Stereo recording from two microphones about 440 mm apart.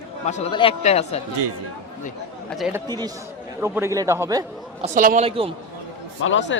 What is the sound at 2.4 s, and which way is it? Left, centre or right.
A man's voice, centre.